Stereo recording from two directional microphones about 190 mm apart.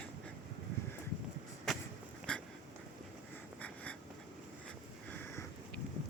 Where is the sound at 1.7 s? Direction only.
Centre (ahead or behind).